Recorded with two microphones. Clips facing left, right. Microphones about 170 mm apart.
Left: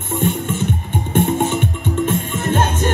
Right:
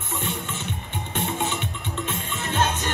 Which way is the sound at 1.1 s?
50° left (ahead or behind).